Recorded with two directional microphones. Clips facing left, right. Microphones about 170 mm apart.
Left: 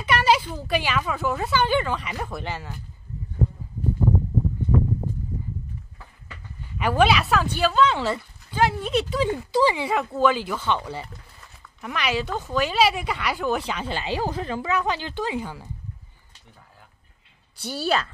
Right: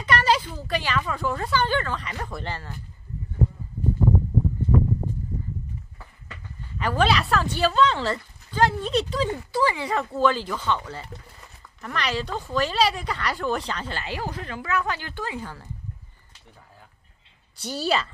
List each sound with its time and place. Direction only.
0.0 s speech: 10° left (ahead or behind)
6.8 s speech: 10° left (ahead or behind)
9.5 s speech: 20° left (ahead or behind)
9.8 s speech: 5° left (ahead or behind)
13.7 s speech: 15° left (ahead or behind)
17.6 s speech: centre (ahead or behind)